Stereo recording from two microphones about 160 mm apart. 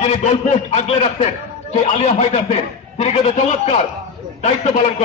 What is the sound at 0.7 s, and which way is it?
A man's voice, 40° left (ahead or behind).